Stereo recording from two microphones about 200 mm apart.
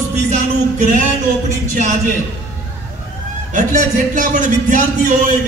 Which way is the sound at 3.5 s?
40° right (ahead or behind).